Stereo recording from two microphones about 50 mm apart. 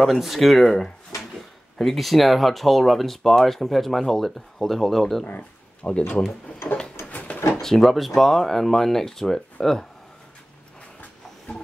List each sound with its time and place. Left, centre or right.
0.0 s speech: centre
5.8 s speech: left
7.1 s a sound: left
7.6 s speech: centre